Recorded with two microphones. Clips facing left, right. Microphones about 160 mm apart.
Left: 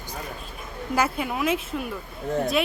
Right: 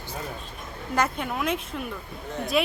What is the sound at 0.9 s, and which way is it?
Speech, 5° left (ahead or behind).